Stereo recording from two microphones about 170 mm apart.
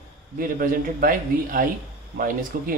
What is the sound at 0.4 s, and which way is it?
A man's voice, 55° right (ahead or behind).